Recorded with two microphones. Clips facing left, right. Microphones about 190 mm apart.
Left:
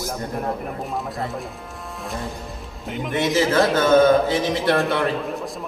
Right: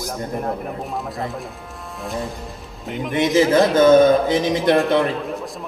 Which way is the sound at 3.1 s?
20° right (ahead or behind).